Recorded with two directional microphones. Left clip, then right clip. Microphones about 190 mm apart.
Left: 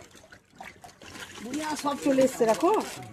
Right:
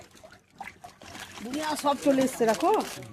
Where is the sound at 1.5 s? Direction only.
35° right (ahead or behind).